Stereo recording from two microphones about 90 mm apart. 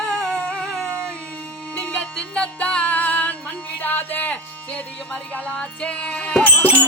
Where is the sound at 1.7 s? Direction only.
15° left (ahead or behind).